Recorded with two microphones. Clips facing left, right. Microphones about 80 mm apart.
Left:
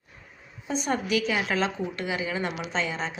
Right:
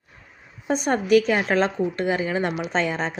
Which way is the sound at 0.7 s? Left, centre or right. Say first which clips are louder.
Right 8 dB; right.